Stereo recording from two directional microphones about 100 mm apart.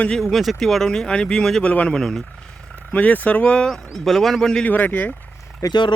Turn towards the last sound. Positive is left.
turn(degrees=45)  # may be behind; listen again after turning